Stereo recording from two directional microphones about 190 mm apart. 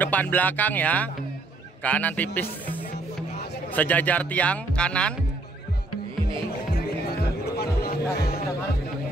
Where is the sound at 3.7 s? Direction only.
10° left (ahead or behind).